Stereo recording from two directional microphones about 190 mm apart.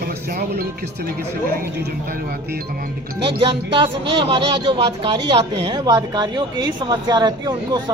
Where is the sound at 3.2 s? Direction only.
30° right (ahead or behind).